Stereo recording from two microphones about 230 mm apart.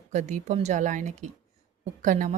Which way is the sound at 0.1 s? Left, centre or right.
Right.